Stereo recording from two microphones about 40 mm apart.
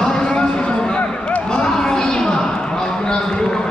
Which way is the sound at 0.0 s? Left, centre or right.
Centre.